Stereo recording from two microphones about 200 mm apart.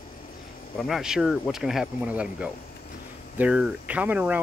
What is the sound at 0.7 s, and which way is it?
Speech, centre (ahead or behind).